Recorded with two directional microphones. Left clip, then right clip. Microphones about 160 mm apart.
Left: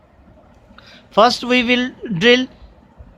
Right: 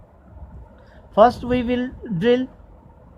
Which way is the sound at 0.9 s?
35° left (ahead or behind).